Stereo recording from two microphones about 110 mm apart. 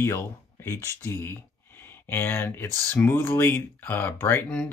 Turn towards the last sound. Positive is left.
turn(degrees=15)  # may be behind; listen again after turning